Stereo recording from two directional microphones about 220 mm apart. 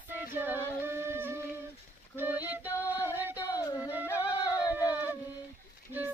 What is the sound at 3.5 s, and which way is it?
Music, 15° left (ahead or behind).